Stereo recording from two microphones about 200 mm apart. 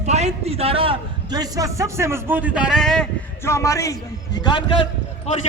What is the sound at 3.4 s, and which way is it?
A man's voice, 15° left (ahead or behind).